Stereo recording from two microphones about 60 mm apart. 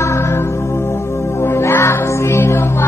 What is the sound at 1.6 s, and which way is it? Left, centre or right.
Music, left.